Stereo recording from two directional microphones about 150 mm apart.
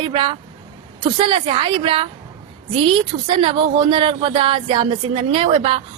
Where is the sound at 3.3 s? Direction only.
35° right (ahead or behind).